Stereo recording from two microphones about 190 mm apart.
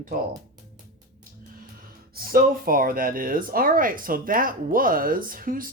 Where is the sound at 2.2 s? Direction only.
50° right (ahead or behind).